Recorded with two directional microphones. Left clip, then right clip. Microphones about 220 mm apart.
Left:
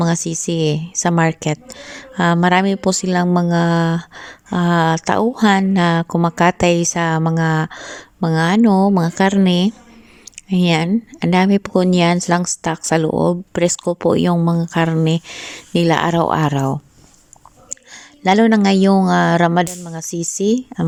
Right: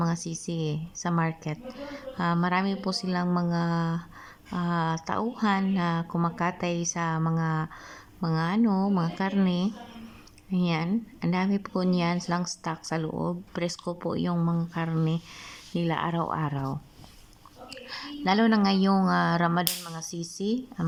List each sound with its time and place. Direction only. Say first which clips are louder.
0.0 s speech: left 12 dB; 35° left (ahead or behind)